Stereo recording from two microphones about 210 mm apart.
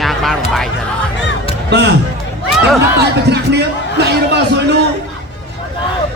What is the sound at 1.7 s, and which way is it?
Speech, 55° right (ahead or behind).